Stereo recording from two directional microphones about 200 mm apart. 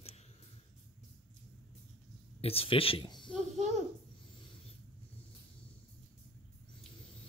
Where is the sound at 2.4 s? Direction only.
30° left (ahead or behind).